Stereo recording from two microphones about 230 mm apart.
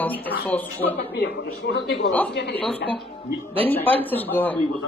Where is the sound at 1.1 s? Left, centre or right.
Left.